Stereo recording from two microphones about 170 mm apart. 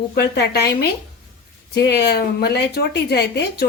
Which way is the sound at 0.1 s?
75° left (ahead or behind).